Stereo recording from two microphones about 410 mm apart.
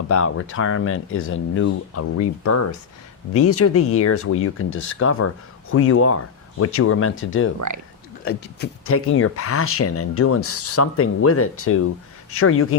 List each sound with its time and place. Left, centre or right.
0.1 s speech: left